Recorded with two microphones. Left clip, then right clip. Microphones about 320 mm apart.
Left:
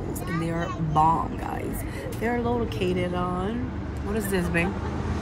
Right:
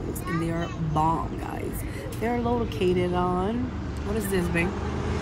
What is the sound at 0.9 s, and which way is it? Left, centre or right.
Speech, centre.